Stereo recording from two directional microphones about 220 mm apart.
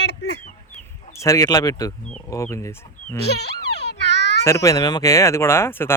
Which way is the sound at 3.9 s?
50° left (ahead or behind).